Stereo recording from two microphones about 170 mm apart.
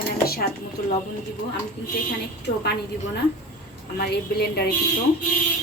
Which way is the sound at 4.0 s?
70° left (ahead or behind).